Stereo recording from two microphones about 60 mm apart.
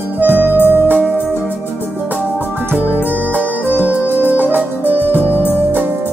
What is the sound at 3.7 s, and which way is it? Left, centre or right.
Music, right.